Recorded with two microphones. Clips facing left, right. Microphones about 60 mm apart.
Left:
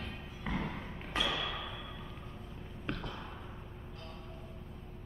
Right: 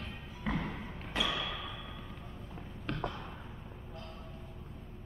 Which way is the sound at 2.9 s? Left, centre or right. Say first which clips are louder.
Right 1 dB; centre.